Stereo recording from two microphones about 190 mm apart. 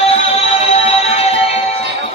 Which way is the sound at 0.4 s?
30° left (ahead or behind).